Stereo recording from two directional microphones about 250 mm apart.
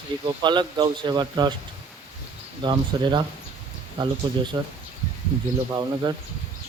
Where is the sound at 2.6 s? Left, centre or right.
Centre.